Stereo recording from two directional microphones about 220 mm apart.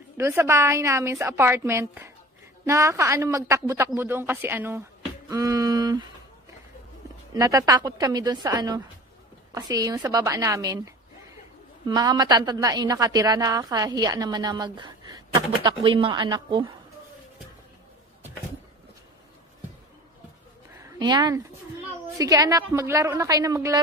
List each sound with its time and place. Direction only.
0.2 s a woman's voice: 10° right (ahead or behind)
7.3 s a woman's voice: 15° right (ahead or behind)
11.9 s a woman's voice: 20° right (ahead or behind)
20.7 s a sound: 15° right (ahead or behind)
22.2 s a woman's voice: 15° right (ahead or behind)